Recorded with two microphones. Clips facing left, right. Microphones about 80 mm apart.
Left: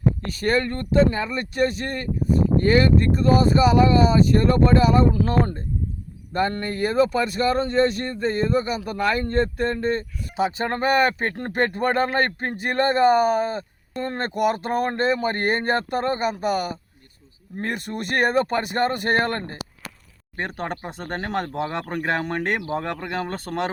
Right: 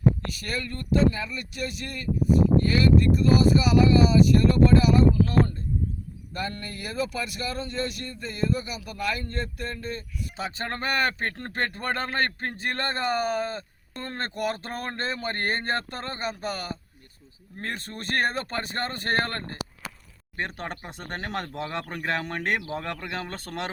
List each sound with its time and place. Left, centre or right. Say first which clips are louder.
0.2 s speech: left 10 dB; left
10.3 s speech: left 9 dB; centre
20.3 s speech: left 4 dB; centre